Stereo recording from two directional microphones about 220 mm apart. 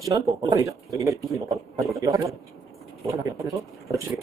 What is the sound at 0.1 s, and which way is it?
Speech, 15° right (ahead or behind).